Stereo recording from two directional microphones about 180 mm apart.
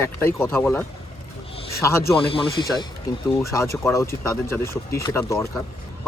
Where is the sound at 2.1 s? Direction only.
30° left (ahead or behind).